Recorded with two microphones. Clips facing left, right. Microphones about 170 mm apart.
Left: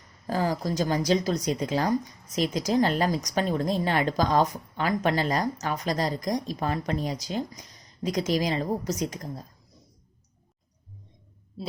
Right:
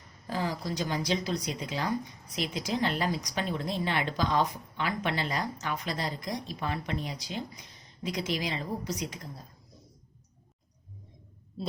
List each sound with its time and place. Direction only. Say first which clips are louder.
0.3 s speech: left 6 dB; 45° left (ahead or behind)
11.6 s speech: even; 5° left (ahead or behind)